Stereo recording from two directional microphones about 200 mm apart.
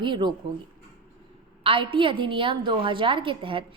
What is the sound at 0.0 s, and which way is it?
Speech, 25° right (ahead or behind).